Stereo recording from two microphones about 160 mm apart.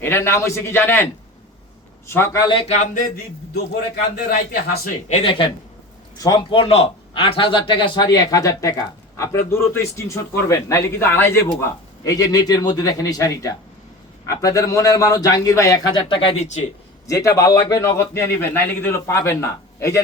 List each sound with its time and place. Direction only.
0.0 s a man's voice: 15° left (ahead or behind)
2.0 s a man's voice: 15° left (ahead or behind)
2.6 s speech: 45° left (ahead or behind)
3.5 s a man's voice: 80° left
5.0 s a man's voice: 40° left (ahead or behind); by 15.8 s 20° left (ahead or behind)
16.0 s speech: 30° left (ahead or behind)
17.1 s a man's voice: 20° left (ahead or behind)